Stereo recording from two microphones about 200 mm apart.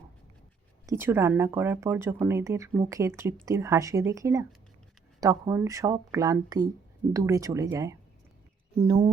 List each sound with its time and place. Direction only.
0.9 s speech: 10° right (ahead or behind)